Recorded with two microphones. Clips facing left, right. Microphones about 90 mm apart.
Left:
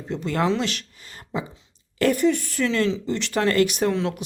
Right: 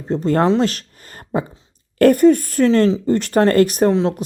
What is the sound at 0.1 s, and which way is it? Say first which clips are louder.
Speech: right 7 dB; 40° right (ahead or behind).